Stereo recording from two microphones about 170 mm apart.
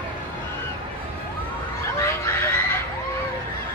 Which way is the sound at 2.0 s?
15° left (ahead or behind).